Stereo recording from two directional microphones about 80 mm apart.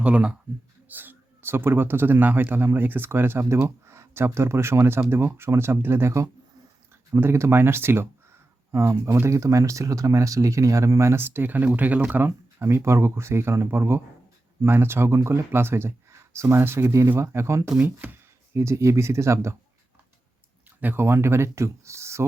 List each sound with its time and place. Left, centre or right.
0.0 s speech: centre; by 9.3 s right
9.3 s speech: right
20.8 s speech: right